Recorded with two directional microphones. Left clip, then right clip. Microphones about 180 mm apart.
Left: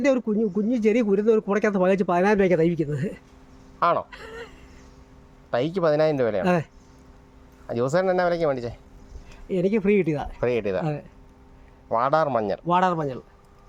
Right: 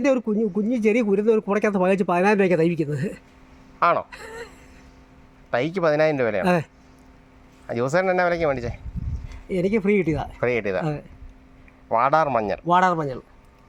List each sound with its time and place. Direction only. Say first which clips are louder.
0.0 s speech: right 1 dB; 20° right (ahead or behind)
3.8 s speech: right 2 dB; centre (ahead or behind)
4.1 s a sound: right 2 dB; 25° right (ahead or behind)
5.5 s speech: right 1 dB; centre (ahead or behind)
6.4 s speech: right 2 dB; 25° right (ahead or behind)
7.7 s speech: right 1 dB; centre (ahead or behind)
9.5 s speech: even; 25° right (ahead or behind)
10.4 s speech: right 1 dB; centre (ahead or behind)
11.9 s speech: right 2 dB; centre (ahead or behind)
12.6 s speech: right 4 dB; 25° right (ahead or behind)